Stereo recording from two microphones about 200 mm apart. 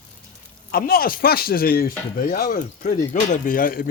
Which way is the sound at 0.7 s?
50° left (ahead or behind).